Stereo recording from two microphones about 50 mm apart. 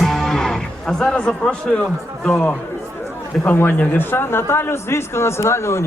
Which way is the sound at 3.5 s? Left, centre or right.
Left.